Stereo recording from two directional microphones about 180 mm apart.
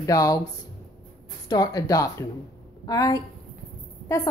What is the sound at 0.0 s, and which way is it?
Speech, 20° left (ahead or behind).